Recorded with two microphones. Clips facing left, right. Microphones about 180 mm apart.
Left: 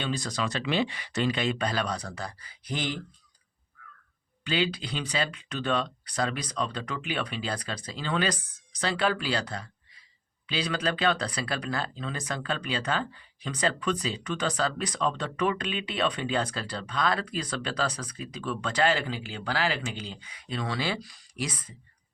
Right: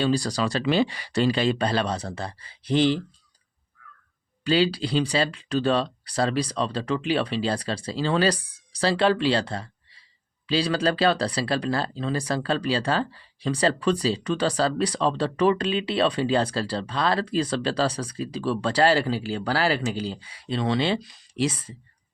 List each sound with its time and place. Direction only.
0.0 s speech: 35° right (ahead or behind)
4.4 s speech: 35° right (ahead or behind)